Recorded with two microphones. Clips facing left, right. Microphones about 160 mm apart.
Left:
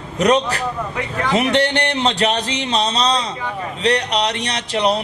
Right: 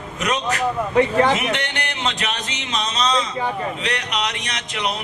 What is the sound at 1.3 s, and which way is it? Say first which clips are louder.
A man's voice: left 7 dB; 35° left (ahead or behind).